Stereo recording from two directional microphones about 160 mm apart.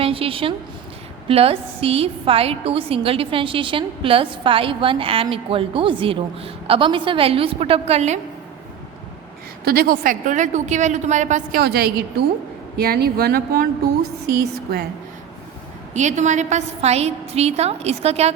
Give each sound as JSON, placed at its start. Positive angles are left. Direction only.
{"t": 0.0, "sound": "a woman's voice", "side_deg": -35}
{"t": 9.6, "sound": "a woman's voice", "side_deg": -70}
{"t": 11.5, "sound": "a woman's voice", "side_deg": -80}
{"t": 16.0, "sound": "a woman's voice", "side_deg": -50}